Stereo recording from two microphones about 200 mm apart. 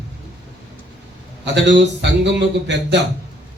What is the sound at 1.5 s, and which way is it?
A man's voice, 60° right (ahead or behind).